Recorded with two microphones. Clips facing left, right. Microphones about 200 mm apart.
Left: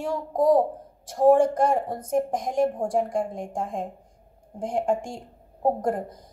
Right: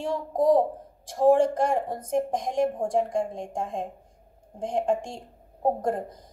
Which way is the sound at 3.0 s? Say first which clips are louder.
Even; 25° right (ahead or behind).